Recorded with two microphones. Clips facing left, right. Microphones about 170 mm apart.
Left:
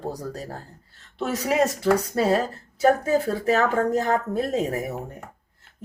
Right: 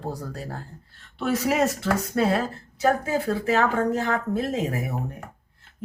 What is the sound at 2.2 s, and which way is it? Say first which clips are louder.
Speech: left 1 dB; 40° left (ahead or behind).